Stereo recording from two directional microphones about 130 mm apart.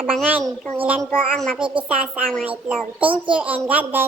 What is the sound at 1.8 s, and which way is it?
A child's voice, 10° right (ahead or behind).